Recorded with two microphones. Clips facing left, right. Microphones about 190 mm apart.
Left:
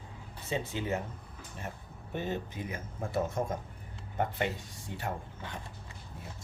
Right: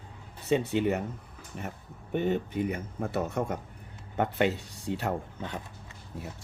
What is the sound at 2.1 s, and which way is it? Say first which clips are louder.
Speech: right 7 dB; 60° right (ahead or behind).